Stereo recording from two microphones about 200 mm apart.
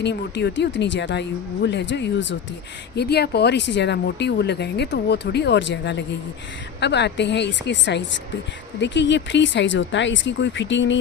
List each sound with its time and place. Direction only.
0.0 s speech: 60° left (ahead or behind)